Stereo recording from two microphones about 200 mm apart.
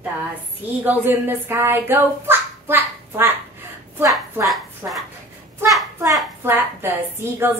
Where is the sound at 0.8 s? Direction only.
10° right (ahead or behind).